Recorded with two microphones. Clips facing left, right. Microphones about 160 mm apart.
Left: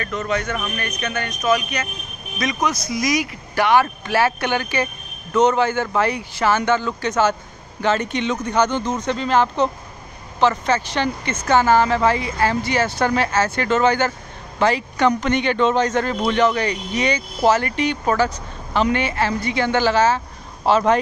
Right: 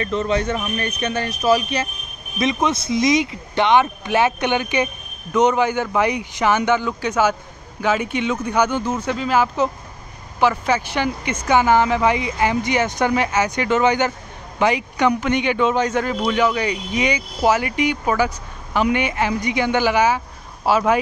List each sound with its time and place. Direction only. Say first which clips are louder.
0.0 s speech: right 3 dB; 30° right (ahead or behind); by 21.0 s 10° right (ahead or behind)